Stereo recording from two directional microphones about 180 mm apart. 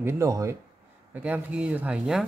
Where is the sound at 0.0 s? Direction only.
15° right (ahead or behind).